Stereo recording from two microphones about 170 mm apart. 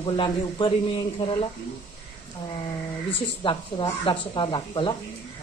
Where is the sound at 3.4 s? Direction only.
30° left (ahead or behind).